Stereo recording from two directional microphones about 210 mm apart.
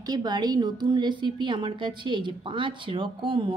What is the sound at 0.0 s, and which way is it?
A woman's voice, 20° right (ahead or behind).